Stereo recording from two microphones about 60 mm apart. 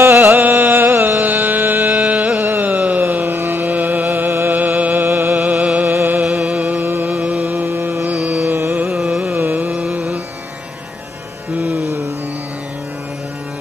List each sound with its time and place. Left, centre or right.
0.0 s music: right
0.4 s music: right
2.4 s a sound: right
6.3 s music: right
8.1 s carnatic music: centre
9.3 s music: right
11.5 s carnatic music: right